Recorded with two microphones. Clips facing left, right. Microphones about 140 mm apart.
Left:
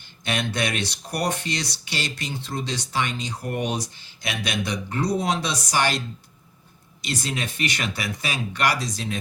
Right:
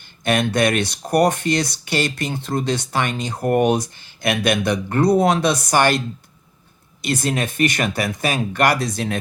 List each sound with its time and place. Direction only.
0.3 s speech: 50° right (ahead or behind)
7.0 s speech: 55° right (ahead or behind)